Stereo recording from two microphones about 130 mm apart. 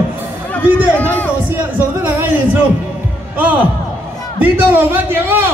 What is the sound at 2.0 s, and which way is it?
A man's voice, 10° right (ahead or behind).